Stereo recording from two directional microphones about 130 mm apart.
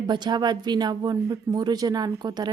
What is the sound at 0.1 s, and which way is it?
Speech, 35° right (ahead or behind).